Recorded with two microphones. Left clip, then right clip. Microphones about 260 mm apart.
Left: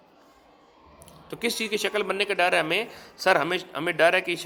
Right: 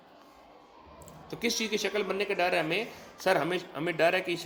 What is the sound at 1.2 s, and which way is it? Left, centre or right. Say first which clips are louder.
A man's voice: left 3 dB; left.